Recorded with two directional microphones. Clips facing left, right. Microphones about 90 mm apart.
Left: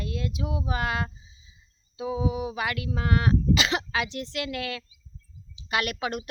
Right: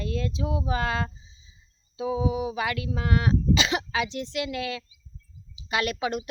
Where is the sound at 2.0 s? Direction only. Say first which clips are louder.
Right 2 dB; 25° left (ahead or behind).